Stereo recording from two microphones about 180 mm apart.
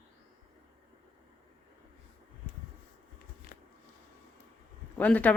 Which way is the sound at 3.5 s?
60° left (ahead or behind).